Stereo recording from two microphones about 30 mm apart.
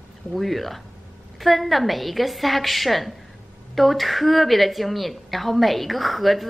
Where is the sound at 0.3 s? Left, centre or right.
Centre.